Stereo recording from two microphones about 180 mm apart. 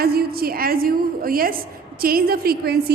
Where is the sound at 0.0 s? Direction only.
60° right (ahead or behind).